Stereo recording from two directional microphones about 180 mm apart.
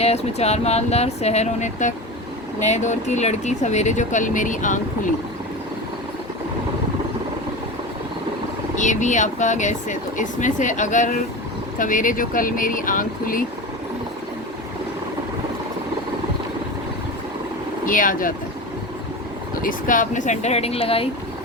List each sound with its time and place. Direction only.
0.0 s speech: 35° left (ahead or behind)
8.7 s speech: 45° left (ahead or behind)
17.8 s speech: 50° left (ahead or behind)
19.6 s speech: 45° left (ahead or behind)